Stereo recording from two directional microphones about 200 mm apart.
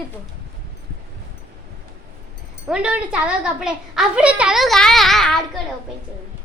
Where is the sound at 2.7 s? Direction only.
5° right (ahead or behind).